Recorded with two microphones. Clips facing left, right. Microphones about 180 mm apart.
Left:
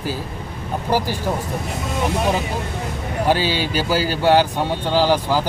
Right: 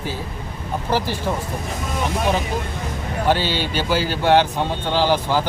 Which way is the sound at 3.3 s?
10° left (ahead or behind).